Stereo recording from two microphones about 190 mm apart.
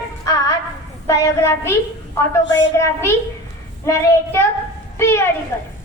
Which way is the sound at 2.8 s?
15° left (ahead or behind).